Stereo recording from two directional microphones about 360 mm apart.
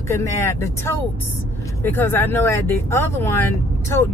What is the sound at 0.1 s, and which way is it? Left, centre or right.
Speech, centre.